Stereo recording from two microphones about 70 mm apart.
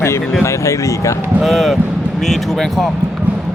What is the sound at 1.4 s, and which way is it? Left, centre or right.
Speech, centre.